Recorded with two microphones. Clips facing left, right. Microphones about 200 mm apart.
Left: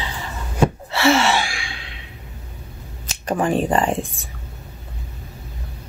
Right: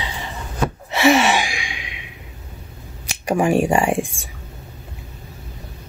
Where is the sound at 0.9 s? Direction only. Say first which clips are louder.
Right 5 dB; 15° right (ahead or behind).